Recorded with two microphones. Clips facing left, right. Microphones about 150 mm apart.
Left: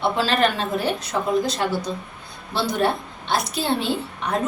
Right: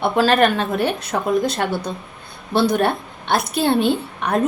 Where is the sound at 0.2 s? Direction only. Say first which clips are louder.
Right 9 dB; 55° right (ahead or behind).